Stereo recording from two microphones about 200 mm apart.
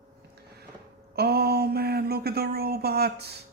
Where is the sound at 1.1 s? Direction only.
50° right (ahead or behind).